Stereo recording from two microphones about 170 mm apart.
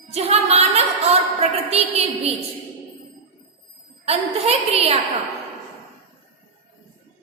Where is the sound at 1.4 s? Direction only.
35° right (ahead or behind).